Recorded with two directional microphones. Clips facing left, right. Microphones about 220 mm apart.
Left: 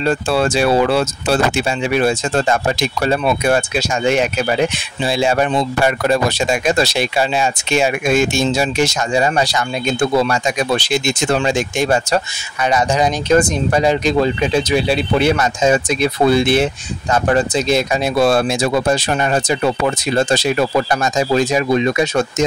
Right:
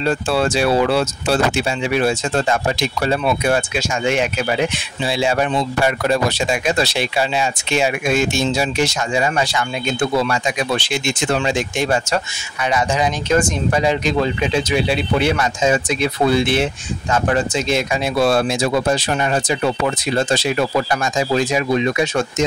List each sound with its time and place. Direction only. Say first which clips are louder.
0.0 s speech: left 2 dB; 50° left (ahead or behind)